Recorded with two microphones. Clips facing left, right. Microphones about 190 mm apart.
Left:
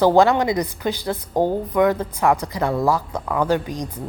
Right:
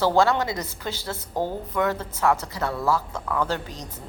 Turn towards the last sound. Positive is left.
turn(degrees=15)  # may be behind; listen again after turning